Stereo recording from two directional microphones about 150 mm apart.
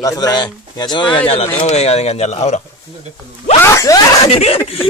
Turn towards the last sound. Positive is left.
turn(degrees=40)  # may be behind; listen again after turning